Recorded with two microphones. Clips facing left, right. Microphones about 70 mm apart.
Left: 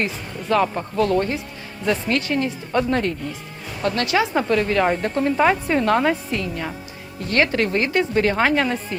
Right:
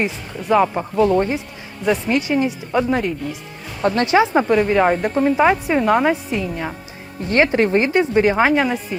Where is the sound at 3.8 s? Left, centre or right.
Right.